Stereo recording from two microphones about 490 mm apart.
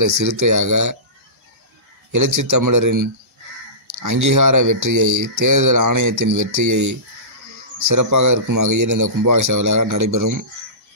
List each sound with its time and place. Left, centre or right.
0.2 s speech: right
2.1 s speech: right